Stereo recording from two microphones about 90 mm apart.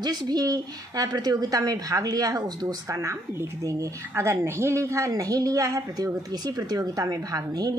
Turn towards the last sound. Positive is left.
turn(degrees=-40)  # may be behind; listen again after turning